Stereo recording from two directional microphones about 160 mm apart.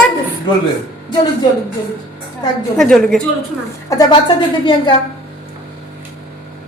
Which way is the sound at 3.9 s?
20° left (ahead or behind).